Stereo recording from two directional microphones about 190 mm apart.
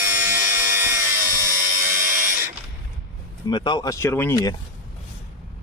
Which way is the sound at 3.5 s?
25° left (ahead or behind).